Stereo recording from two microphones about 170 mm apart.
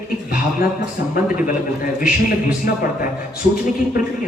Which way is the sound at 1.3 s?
55° left (ahead or behind).